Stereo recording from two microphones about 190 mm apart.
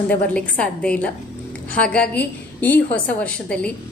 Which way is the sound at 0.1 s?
5° left (ahead or behind).